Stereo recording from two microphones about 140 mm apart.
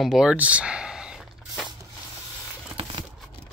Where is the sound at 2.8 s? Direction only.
40° right (ahead or behind).